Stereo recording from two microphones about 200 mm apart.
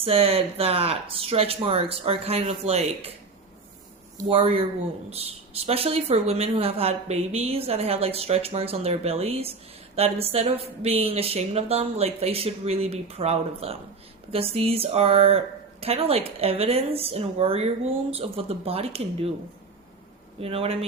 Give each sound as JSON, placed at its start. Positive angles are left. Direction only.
{"t": 0.0, "sound": "speech", "side_deg": -30}
{"t": 4.2, "sound": "speech", "side_deg": -25}
{"t": 20.4, "sound": "speech", "side_deg": -30}